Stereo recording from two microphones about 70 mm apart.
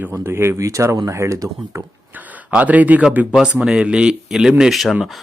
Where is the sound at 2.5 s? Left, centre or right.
Right; by 4.9 s centre.